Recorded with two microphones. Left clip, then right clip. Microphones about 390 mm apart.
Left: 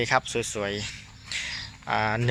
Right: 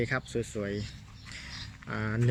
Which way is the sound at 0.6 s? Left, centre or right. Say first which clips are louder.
Left 5 dB; left.